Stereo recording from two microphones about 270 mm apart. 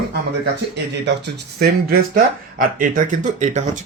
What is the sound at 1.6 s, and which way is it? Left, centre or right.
Speech, right.